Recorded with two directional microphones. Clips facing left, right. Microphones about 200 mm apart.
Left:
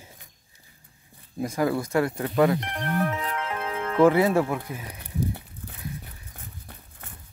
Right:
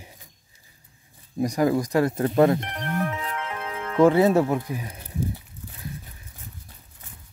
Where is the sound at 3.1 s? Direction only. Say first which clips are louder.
Left 1 dB; 40° left (ahead or behind).